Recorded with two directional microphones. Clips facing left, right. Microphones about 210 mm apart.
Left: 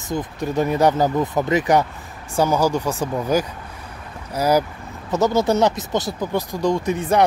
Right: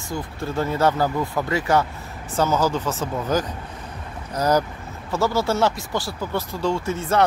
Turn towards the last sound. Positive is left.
turn(degrees=15)  # may be behind; listen again after turning